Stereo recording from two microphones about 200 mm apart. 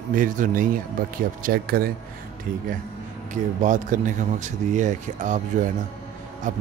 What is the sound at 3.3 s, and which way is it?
Speech, 40° right (ahead or behind).